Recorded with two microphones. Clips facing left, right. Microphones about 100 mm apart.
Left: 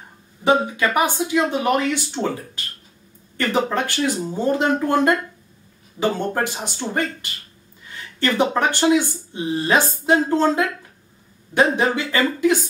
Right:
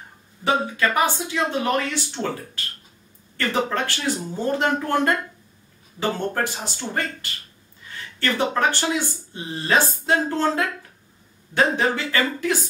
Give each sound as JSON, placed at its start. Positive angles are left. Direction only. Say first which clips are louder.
{"t": 0.4, "sound": "speech", "louder": "left 4 dB", "side_deg": 20}
{"t": 2.2, "sound": "speech", "louder": "left 2 dB", "side_deg": 0}
{"t": 3.3, "sound": "speech", "louder": "left 3 dB", "side_deg": 15}